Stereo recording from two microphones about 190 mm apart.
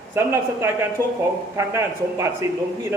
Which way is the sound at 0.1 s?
15° right (ahead or behind).